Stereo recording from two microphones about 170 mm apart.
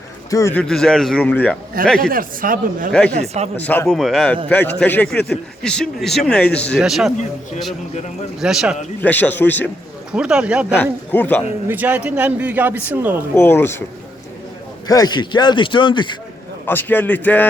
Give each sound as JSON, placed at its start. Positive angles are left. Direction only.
{"t": 0.3, "sound": "a man's voice", "side_deg": 20}
{"t": 0.5, "sound": "a man's voice", "side_deg": 5}
{"t": 2.0, "sound": "a man's voice", "side_deg": -55}
{"t": 3.2, "sound": "a man's voice", "side_deg": -40}
{"t": 3.6, "sound": "a man's voice", "side_deg": 10}
{"t": 7.9, "sound": "a man's voice", "side_deg": 40}
{"t": 8.4, "sound": "a man's voice", "side_deg": -5}
{"t": 9.0, "sound": "speech", "side_deg": 10}
{"t": 10.1, "sound": "a man's voice", "side_deg": -5}
{"t": 11.1, "sound": "speech", "side_deg": 10}
{"t": 11.7, "sound": "a man's voice", "side_deg": -10}
{"t": 13.3, "sound": "speech", "side_deg": 10}
{"t": 14.8, "sound": "speech", "side_deg": 20}
{"t": 16.6, "sound": "speech", "side_deg": 10}